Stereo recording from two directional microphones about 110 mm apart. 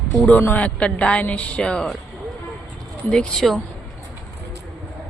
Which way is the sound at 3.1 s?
5° left (ahead or behind).